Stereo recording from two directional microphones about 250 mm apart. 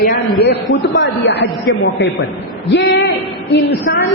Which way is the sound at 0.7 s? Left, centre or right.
Left.